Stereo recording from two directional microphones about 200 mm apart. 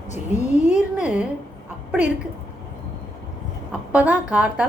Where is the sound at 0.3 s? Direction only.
35° left (ahead or behind).